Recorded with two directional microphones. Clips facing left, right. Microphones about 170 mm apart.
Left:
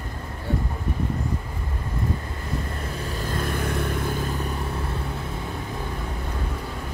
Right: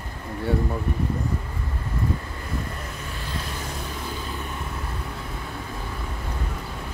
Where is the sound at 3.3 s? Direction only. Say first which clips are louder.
Left 8 dB; 55° left (ahead or behind).